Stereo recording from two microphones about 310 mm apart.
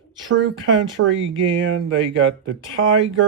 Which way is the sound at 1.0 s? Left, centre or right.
Right.